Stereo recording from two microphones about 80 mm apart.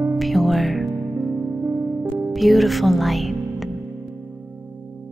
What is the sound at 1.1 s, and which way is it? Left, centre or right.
Music, right.